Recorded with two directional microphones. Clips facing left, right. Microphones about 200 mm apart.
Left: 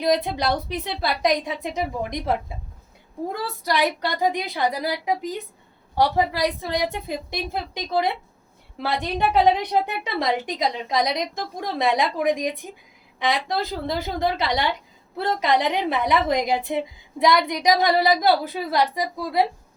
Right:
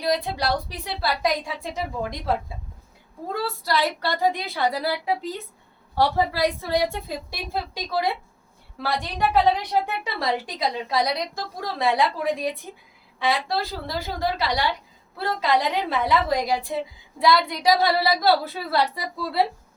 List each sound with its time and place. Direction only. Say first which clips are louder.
0.0 s a woman's voice: left 3 dB; 20° left (ahead or behind)
3.4 s a woman's voice: left 1 dB; 20° left (ahead or behind)